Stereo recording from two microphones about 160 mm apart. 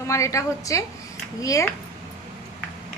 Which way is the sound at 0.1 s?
20° left (ahead or behind).